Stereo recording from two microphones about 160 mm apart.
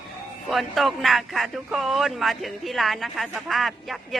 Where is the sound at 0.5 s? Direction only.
Centre (ahead or behind).